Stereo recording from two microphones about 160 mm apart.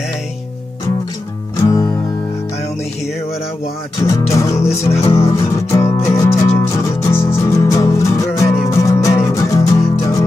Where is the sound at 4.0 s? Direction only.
20° left (ahead or behind).